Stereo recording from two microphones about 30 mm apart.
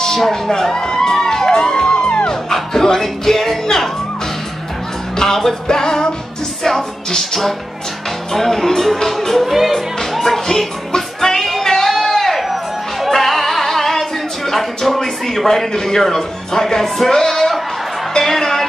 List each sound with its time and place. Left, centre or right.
0.3 s speech: centre
1.1 s music: centre
3.0 s speech: centre
5.1 s music: centre
8.3 s speech: centre
9.5 s speech: centre
10.1 s music: centre